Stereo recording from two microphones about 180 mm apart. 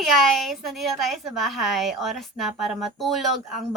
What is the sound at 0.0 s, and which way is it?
A woman's voice, centre (ahead or behind).